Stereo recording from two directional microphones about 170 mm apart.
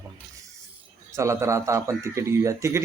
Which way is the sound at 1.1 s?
15° right (ahead or behind).